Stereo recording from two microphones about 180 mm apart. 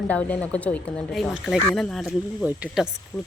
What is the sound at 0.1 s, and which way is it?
Speech, 5° left (ahead or behind).